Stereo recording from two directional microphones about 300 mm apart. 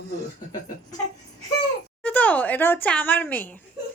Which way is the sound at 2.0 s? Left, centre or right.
Centre.